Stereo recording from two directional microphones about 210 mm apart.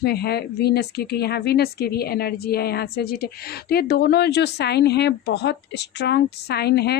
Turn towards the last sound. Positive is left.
turn(degrees=50)  # may be behind; listen again after turning